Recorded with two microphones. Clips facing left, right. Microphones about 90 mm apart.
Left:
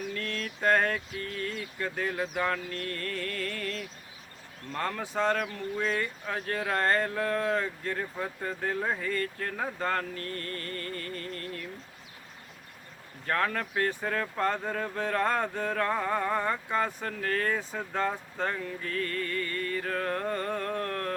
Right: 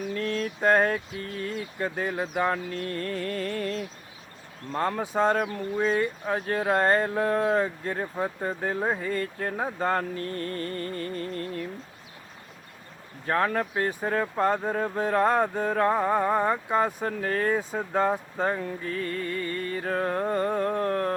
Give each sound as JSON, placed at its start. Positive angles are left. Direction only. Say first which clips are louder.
{"t": 0.1, "sound": "speech", "louder": "right 6 dB", "side_deg": -20}
{"t": 13.2, "sound": "speech", "louder": "right 4 dB", "side_deg": -20}